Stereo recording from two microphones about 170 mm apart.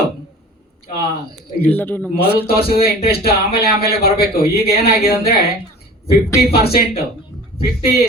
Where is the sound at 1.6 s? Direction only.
10° left (ahead or behind).